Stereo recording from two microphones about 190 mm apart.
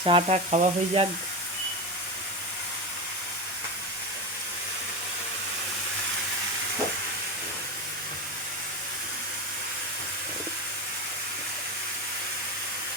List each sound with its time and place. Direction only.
0.0 s speech: 30° right (ahead or behind)